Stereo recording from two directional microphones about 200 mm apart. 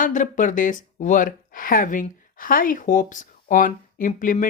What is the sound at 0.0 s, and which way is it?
Speech, 40° left (ahead or behind).